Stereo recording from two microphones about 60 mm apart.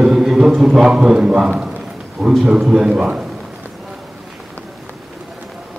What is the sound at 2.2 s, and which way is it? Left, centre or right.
Speech, right.